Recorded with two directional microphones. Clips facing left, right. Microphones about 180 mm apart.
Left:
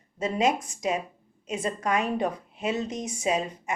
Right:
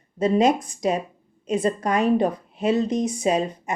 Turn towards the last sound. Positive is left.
turn(degrees=-35)  # may be behind; listen again after turning